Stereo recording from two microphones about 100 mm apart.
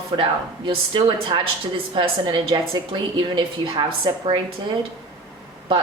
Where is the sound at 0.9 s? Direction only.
50° right (ahead or behind).